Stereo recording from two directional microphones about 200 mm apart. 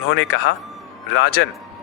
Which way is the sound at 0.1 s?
55° left (ahead or behind).